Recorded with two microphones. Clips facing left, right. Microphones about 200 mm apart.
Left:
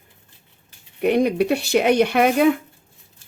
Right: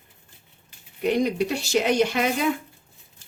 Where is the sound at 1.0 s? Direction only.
60° left (ahead or behind).